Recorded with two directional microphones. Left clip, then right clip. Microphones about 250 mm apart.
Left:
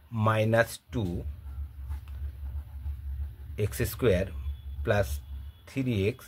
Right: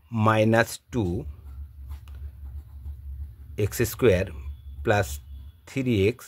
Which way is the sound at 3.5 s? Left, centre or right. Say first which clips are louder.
Right 6 dB; right.